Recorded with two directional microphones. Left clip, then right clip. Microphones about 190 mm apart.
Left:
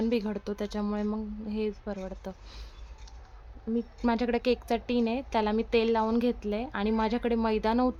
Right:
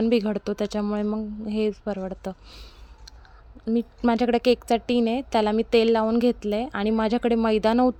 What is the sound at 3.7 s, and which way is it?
A woman's voice, 40° right (ahead or behind).